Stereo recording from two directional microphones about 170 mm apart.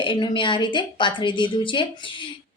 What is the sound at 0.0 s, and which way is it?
A woman's voice, 30° left (ahead or behind).